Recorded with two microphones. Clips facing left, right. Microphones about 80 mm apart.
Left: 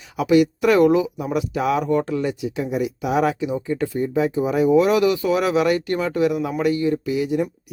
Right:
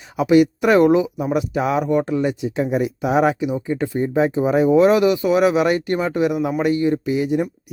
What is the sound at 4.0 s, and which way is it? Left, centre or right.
Speech, right.